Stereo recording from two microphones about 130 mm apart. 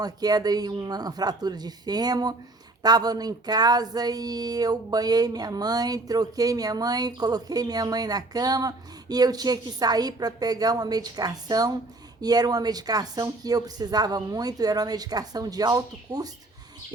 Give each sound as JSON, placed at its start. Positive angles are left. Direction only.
{"t": 0.0, "sound": "speech", "side_deg": -30}